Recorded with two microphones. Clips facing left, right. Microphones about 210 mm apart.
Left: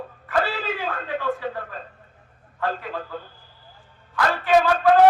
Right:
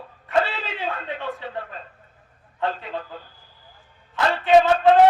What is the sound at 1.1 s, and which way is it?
Speech, 25° right (ahead or behind).